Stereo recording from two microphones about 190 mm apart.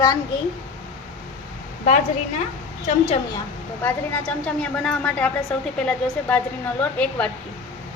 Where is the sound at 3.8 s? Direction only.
10° left (ahead or behind).